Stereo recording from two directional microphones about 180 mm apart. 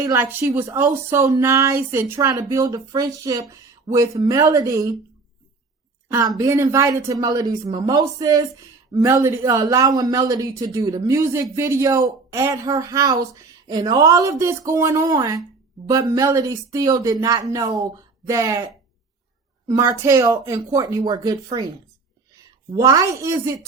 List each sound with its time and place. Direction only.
0.0 s a woman's voice: 15° right (ahead or behind)
6.1 s a woman's voice: 20° right (ahead or behind)
22.7 s a woman's voice: 20° right (ahead or behind)